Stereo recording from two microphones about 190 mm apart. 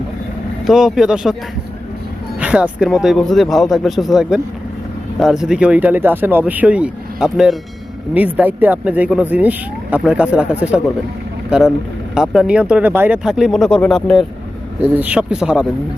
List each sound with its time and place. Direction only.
0.7 s speech: centre (ahead or behind)
2.4 s speech: 5° right (ahead or behind)
14.8 s speech: 10° right (ahead or behind)